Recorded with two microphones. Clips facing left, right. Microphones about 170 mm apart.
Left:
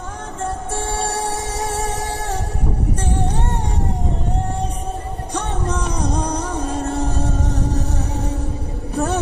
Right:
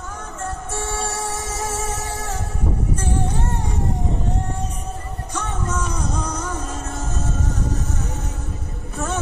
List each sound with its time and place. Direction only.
0.4 s music: 30° left (ahead or behind)
5.3 s music: 35° left (ahead or behind)
8.9 s a sound: 35° left (ahead or behind)